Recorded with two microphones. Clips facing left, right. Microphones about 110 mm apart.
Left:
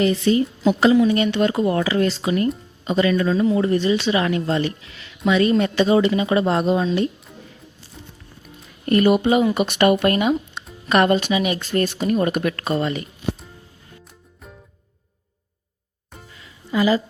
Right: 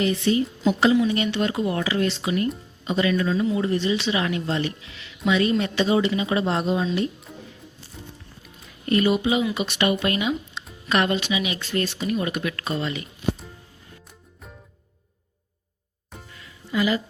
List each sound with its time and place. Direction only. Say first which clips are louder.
0.0 s a woman's voice: left 4 dB; 40° left (ahead or behind)
0.6 s speech: left 4 dB; 50° left (ahead or behind)
8.9 s speech: left 5 dB; 50° left (ahead or behind)
16.3 s music: left 3 dB; 30° left (ahead or behind)